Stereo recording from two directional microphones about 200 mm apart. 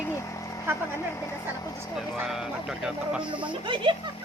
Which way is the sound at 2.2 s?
Centre (ahead or behind).